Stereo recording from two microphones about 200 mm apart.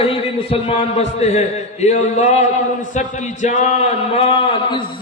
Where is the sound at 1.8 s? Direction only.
35° left (ahead or behind).